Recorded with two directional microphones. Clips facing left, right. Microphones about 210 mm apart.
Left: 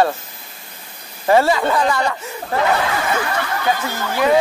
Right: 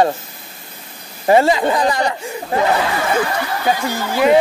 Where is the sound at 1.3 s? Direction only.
20° right (ahead or behind).